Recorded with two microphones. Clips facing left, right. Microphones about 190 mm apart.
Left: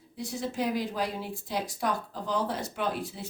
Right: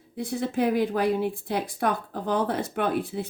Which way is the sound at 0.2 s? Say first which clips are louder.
Right 6 dB; 55° right (ahead or behind).